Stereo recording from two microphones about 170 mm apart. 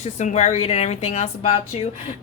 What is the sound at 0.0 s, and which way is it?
A woman's voice, 40° left (ahead or behind).